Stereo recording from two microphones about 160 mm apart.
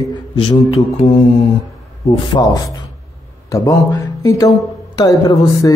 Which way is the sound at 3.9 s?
20° left (ahead or behind).